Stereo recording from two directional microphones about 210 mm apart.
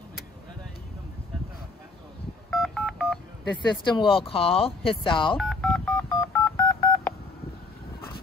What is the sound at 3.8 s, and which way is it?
Speech, 25° left (ahead or behind).